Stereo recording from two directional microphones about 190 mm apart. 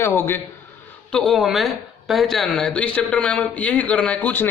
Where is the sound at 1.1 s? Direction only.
Centre (ahead or behind).